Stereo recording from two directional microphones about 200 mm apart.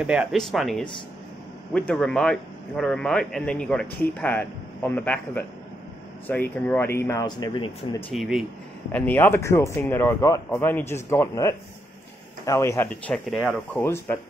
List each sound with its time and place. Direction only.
0.0 s a man's voice: 5° right (ahead or behind); by 8.0 s 20° left (ahead or behind)
8.1 s a man's voice: centre (ahead or behind)
8.9 s speech: 10° left (ahead or behind)
13.8 s speech: 10° left (ahead or behind)